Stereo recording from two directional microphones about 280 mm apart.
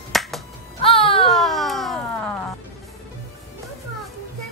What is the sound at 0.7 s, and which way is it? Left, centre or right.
Music, centre.